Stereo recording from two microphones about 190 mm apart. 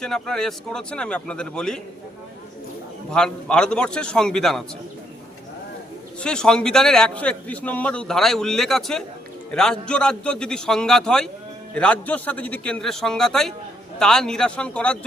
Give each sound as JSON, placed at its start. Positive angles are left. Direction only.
{"t": 0.0, "sound": "a man's voice", "side_deg": 5}
{"t": 3.1, "sound": "a man's voice", "side_deg": 5}
{"t": 6.1, "sound": "a man's voice", "side_deg": 5}